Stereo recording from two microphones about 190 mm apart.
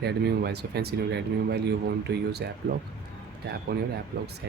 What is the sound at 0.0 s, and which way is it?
Speech, 60° right (ahead or behind).